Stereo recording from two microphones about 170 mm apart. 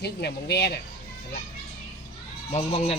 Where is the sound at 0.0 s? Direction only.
75° left (ahead or behind).